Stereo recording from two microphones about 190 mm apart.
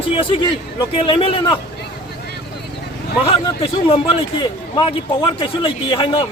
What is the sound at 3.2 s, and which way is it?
A man's voice, 30° left (ahead or behind).